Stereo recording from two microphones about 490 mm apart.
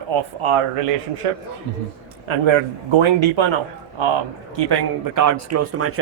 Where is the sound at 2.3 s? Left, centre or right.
Right.